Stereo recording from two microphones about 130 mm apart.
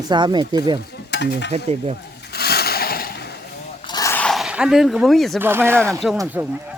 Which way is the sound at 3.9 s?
30° left (ahead or behind).